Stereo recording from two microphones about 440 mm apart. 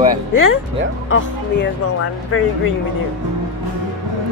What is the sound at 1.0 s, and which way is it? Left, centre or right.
Speech, left.